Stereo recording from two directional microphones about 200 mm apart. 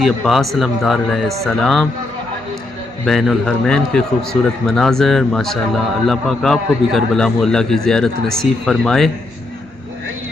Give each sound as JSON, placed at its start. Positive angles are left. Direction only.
{"t": 0.0, "sound": "a man's voice", "side_deg": 0}
{"t": 3.1, "sound": "a man's voice", "side_deg": 0}